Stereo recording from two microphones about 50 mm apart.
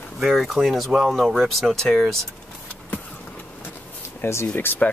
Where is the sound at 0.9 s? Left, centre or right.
Centre.